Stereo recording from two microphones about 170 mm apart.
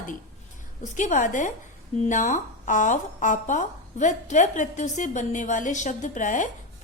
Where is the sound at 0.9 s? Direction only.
45° left (ahead or behind).